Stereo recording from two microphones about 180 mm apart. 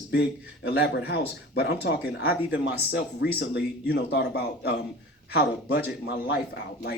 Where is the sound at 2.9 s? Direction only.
65° left (ahead or behind).